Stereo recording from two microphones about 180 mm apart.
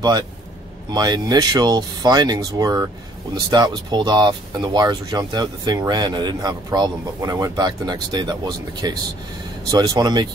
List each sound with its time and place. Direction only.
0.9 s speech: 20° right (ahead or behind)